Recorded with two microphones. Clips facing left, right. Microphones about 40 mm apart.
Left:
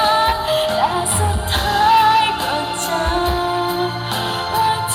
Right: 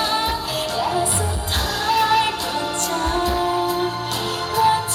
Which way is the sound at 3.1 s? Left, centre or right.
Left.